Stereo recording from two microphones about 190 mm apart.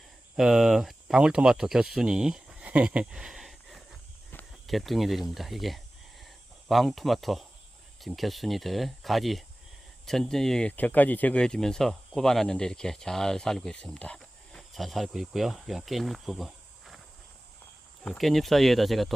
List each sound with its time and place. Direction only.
0.3 s speech: centre (ahead or behind)
18.0 s speech: centre (ahead or behind)